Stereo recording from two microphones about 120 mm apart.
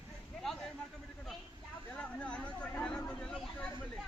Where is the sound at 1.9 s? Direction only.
10° left (ahead or behind).